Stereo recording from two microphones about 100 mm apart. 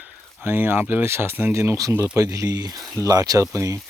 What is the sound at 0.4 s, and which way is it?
Speech, 20° right (ahead or behind).